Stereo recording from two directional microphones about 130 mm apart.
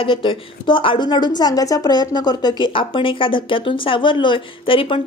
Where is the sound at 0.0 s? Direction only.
40° left (ahead or behind).